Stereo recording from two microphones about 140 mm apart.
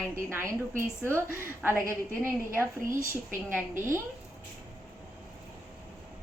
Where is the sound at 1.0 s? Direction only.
15° left (ahead or behind).